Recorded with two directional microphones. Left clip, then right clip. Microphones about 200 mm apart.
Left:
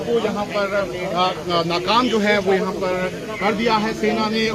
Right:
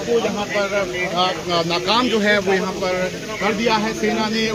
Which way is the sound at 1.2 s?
5° right (ahead or behind).